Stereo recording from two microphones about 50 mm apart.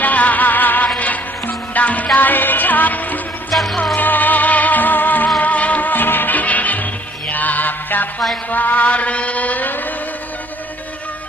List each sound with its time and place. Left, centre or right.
0.0 s music: left
3.5 s music: centre
3.9 s music: left
8.4 s mantra: left